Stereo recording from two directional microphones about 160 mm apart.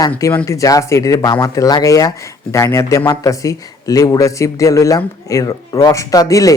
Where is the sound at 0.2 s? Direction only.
15° left (ahead or behind).